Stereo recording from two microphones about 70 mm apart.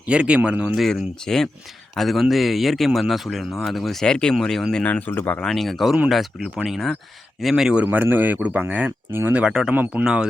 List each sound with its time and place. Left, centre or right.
0.0 s a man's voice: centre
0.8 s speech: centre
4.7 s speech: centre
5.4 s a man's voice: centre
7.8 s a man's voice: right; by 9.7 s centre
9.7 s speech: right
10.0 s a man's voice: centre